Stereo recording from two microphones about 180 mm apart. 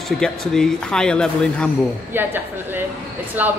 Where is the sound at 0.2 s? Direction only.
5° left (ahead or behind).